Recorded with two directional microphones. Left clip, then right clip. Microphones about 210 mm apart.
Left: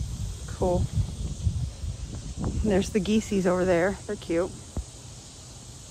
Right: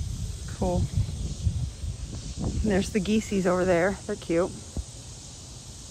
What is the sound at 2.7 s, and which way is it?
Speech, 15° left (ahead or behind).